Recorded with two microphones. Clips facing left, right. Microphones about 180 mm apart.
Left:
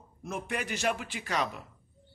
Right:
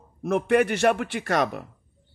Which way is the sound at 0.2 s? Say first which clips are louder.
Right 15 dB; 60° right (ahead or behind).